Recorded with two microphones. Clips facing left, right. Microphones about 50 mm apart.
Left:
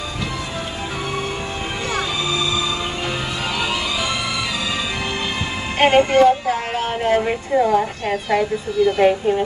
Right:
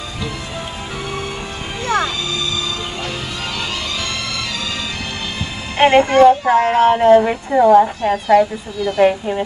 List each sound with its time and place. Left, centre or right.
5.8 s speech: right
7.2 s speech: right
8.0 s speech: centre